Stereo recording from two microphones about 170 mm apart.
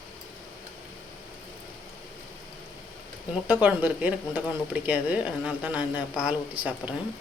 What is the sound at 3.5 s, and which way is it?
Speech, 10° right (ahead or behind).